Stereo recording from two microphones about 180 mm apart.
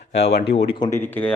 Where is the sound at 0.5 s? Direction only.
30° left (ahead or behind).